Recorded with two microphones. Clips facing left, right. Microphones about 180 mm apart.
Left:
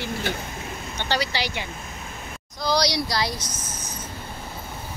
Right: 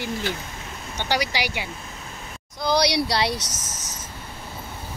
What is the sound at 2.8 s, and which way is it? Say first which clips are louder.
Speech: right 3 dB; 65° right (ahead or behind).